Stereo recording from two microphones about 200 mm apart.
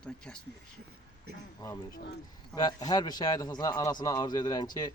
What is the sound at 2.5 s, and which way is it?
A man's voice, 20° left (ahead or behind).